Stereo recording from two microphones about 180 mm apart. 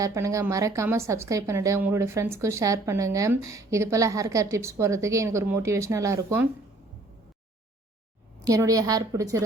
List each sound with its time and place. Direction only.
0.0 s speech: 15° right (ahead or behind)
8.4 s a woman's voice: 20° right (ahead or behind)